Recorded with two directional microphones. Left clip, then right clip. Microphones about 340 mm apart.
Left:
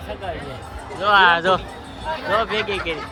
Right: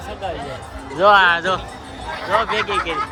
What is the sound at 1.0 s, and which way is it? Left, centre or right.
Speech, centre.